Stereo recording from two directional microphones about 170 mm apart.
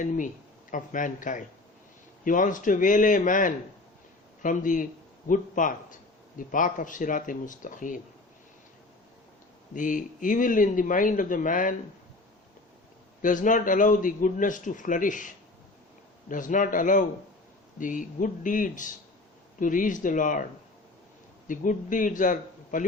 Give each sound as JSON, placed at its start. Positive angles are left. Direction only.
{"t": 0.7, "sound": "a man's voice", "side_deg": 50}
{"t": 9.7, "sound": "a man's voice", "side_deg": 50}
{"t": 13.2, "sound": "a man's voice", "side_deg": 50}
{"t": 16.3, "sound": "a man's voice", "side_deg": 50}
{"t": 21.4, "sound": "a man's voice", "side_deg": 50}